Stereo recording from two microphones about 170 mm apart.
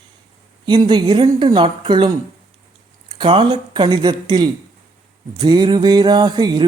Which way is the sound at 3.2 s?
30° right (ahead or behind).